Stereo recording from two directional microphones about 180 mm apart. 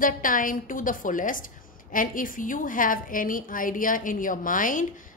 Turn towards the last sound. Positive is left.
turn(degrees=50)  # may be behind; listen again after turning